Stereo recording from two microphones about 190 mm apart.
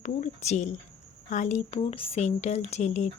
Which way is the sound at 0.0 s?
40° left (ahead or behind).